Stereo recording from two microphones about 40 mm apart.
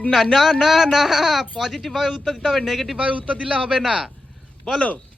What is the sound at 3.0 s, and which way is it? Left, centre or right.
Speech, right.